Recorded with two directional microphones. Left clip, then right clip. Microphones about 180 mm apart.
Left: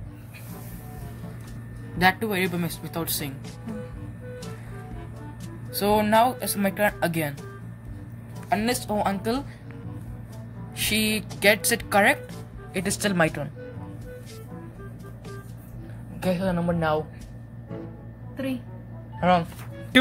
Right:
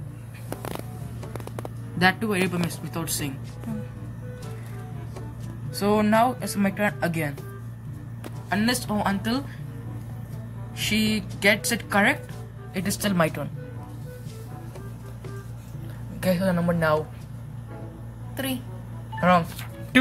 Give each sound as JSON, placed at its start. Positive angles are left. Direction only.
{"t": 2.0, "sound": "speech", "side_deg": 35}
{"t": 5.7, "sound": "speech", "side_deg": 40}
{"t": 8.5, "sound": "speech", "side_deg": 45}
{"t": 10.8, "sound": "speech", "side_deg": 45}
{"t": 16.2, "sound": "a woman's voice", "side_deg": 20}
{"t": 18.3, "sound": "a woman's voice", "side_deg": -45}
{"t": 19.1, "sound": "speech", "side_deg": 25}